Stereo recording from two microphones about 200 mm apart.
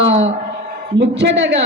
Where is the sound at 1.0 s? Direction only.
60° right (ahead or behind).